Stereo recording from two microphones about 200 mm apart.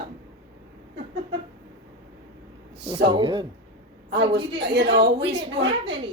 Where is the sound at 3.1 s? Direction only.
20° right (ahead or behind).